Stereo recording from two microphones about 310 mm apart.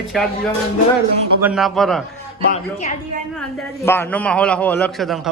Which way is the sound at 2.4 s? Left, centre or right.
Left.